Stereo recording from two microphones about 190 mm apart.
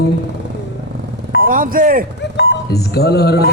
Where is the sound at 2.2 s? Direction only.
60° left (ahead or behind).